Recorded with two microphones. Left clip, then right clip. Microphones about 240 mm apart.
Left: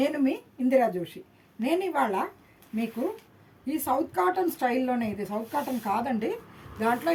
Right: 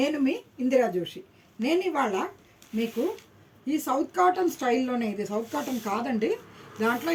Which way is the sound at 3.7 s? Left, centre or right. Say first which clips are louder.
Even; centre.